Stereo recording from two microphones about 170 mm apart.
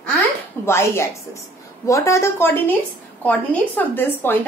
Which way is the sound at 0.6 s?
15° left (ahead or behind).